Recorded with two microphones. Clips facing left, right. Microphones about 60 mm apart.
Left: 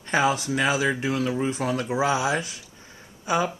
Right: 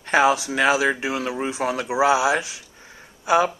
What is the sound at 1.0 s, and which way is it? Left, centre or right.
Speech, right.